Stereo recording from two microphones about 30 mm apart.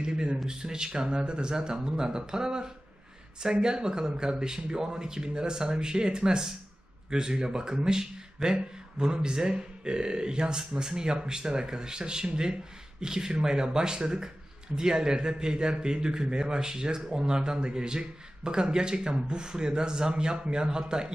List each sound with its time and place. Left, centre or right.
0.0 s a man's voice: right